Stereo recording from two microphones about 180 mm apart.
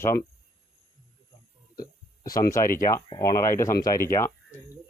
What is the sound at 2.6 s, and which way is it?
Speech, 50° left (ahead or behind).